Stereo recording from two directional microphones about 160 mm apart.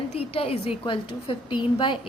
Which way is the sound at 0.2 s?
35° left (ahead or behind).